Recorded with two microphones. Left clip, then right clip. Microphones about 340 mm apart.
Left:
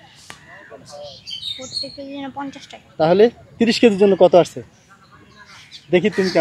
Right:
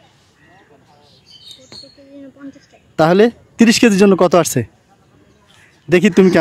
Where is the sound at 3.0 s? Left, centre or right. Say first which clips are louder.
Right 2 dB; right.